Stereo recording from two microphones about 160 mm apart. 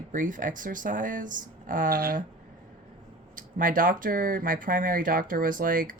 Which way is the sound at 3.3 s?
55° right (ahead or behind).